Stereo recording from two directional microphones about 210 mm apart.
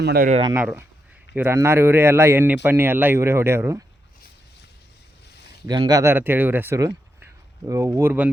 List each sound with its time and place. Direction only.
0.0 s speech: 50° right (ahead or behind)
0.3 s speech: 30° right (ahead or behind)
0.5 s speech: 10° right (ahead or behind)
5.6 s speech: 20° right (ahead or behind)